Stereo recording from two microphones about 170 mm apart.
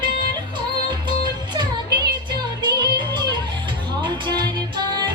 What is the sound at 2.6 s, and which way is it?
Music, 25° right (ahead or behind).